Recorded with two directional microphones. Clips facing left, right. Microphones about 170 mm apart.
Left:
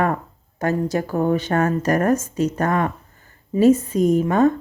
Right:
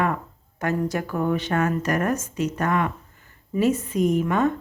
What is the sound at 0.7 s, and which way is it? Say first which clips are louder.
A woman's voice: left 3 dB; 25° left (ahead or behind).